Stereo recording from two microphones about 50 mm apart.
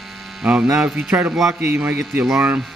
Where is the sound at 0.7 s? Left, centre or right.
Centre.